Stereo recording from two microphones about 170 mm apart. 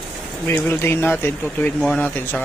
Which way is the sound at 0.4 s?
10° left (ahead or behind).